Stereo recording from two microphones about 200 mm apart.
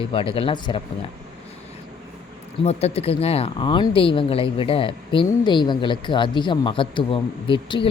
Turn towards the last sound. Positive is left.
turn(degrees=25)  # may be behind; listen again after turning